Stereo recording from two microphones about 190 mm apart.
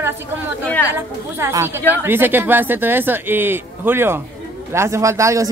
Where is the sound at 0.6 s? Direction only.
10° left (ahead or behind).